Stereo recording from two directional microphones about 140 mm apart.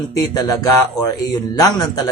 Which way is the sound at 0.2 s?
30° left (ahead or behind).